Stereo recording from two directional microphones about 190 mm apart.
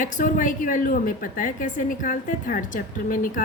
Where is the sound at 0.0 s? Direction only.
45° left (ahead or behind).